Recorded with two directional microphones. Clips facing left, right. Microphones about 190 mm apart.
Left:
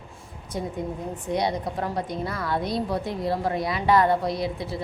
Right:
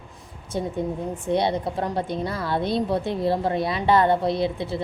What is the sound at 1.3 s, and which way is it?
A woman's voice, 25° right (ahead or behind).